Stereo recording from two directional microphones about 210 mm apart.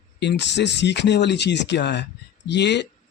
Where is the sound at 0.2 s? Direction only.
55° left (ahead or behind).